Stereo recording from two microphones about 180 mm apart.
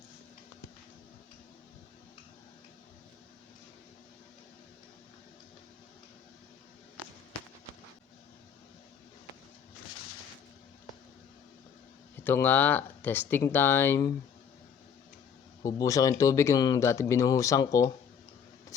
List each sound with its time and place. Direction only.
12.1 s speech: 10° left (ahead or behind)
15.6 s speech: 20° left (ahead or behind)